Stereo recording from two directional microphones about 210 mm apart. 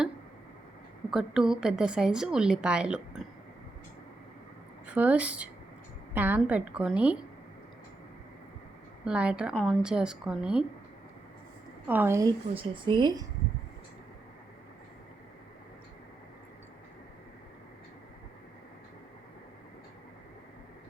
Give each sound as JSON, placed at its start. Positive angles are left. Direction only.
{"t": 1.1, "sound": "a woman's voice", "side_deg": -5}
{"t": 4.9, "sound": "a woman's voice", "side_deg": -5}
{"t": 9.0, "sound": "a woman's voice", "side_deg": -5}
{"t": 11.9, "sound": "a woman's voice", "side_deg": -10}
{"t": 12.5, "sound": "speech", "side_deg": -25}